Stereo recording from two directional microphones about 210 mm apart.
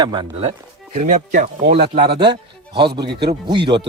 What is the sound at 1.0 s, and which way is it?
Speech, 35° right (ahead or behind).